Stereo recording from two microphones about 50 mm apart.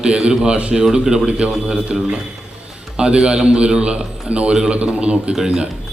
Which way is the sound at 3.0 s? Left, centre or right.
Centre.